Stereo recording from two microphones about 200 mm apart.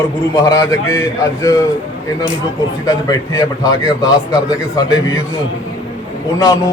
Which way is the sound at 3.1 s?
15° left (ahead or behind).